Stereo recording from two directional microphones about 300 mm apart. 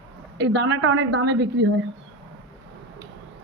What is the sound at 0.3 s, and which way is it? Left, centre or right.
A woman's voice, right.